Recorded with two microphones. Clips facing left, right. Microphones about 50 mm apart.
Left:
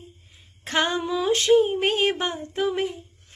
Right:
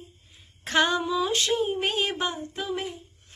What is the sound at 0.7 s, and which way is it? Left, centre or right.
Female singing, left.